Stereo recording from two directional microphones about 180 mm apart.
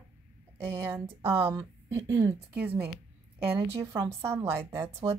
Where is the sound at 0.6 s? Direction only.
15° right (ahead or behind).